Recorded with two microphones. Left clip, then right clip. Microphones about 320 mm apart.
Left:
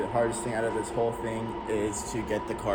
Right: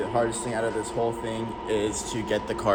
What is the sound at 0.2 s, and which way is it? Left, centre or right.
Speech, centre.